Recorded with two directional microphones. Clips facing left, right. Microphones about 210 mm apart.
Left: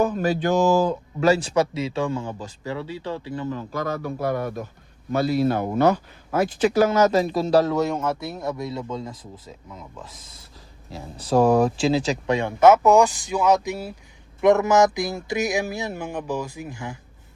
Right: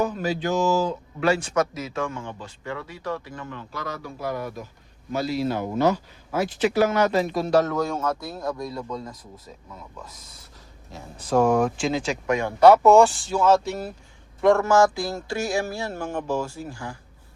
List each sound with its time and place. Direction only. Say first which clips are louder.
0.0 s a man's voice: left 3 dB; 55° left (ahead or behind); by 3.6 s 30° left (ahead or behind)
3.7 s a man's voice: left 7 dB; 50° left (ahead or behind); by 9.1 s 25° left (ahead or behind)
10.9 s a man's voice: left 2 dB; 35° left (ahead or behind)
12.4 s speech: right 1 dB; 20° left (ahead or behind)